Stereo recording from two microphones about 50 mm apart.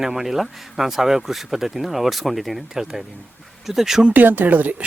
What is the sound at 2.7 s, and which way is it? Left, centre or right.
Speech, centre.